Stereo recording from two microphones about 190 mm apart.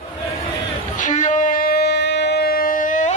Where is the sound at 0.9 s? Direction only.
40° left (ahead or behind).